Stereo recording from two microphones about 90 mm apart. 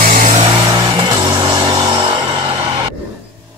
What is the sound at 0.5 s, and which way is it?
Vehicle, 90° right.